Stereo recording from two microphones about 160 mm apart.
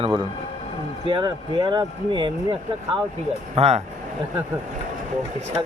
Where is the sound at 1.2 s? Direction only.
30° right (ahead or behind).